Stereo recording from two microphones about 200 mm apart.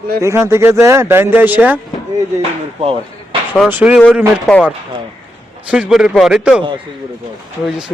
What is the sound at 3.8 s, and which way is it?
Speech, 10° right (ahead or behind).